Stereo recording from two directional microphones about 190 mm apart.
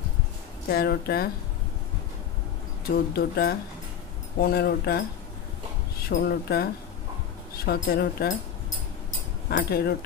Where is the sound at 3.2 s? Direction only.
55° left (ahead or behind).